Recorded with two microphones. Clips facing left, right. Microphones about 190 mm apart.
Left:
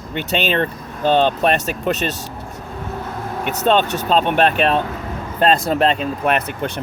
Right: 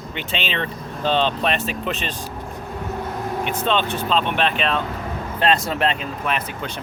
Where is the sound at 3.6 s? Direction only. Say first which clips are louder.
Left 7 dB; 45° left (ahead or behind).